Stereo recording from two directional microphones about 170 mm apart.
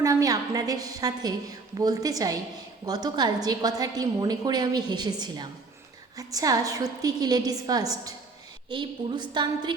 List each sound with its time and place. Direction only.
0.0 s a woman's voice: 20° right (ahead or behind)